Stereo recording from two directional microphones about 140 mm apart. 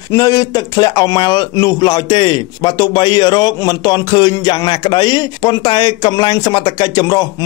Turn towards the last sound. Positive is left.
turn(degrees=30)  # may be behind; listen again after turning